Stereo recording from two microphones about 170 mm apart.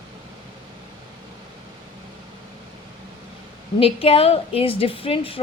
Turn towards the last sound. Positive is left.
turn(degrees=30)  # may be behind; listen again after turning